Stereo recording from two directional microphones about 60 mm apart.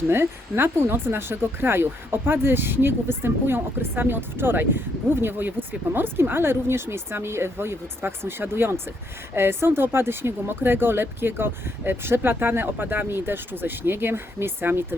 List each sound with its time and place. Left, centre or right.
0.1 s speech: right